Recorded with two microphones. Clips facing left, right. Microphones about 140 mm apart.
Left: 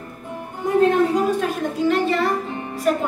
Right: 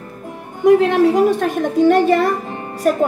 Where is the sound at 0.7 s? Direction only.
90° right.